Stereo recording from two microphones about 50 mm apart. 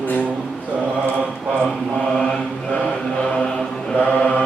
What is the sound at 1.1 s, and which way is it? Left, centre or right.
Mantra, right.